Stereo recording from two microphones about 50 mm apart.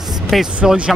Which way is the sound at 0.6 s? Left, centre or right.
Centre.